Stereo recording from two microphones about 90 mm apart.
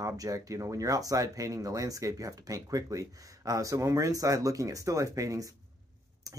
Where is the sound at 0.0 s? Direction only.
40° right (ahead or behind).